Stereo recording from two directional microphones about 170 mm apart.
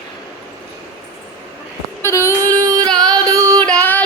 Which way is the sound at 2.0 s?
15° left (ahead or behind).